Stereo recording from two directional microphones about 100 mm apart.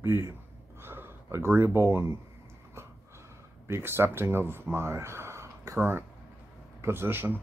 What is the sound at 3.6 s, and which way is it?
A man's voice, 25° right (ahead or behind).